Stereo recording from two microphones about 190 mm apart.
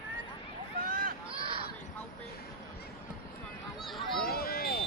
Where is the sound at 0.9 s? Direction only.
45° right (ahead or behind).